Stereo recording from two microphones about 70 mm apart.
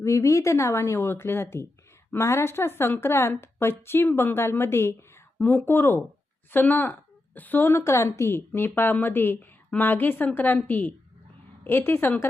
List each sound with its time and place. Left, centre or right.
0.0 s a woman's voice: left
7.7 s a woman's voice: left